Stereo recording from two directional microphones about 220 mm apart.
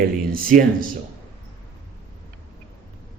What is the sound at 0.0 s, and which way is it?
Speech, 40° right (ahead or behind).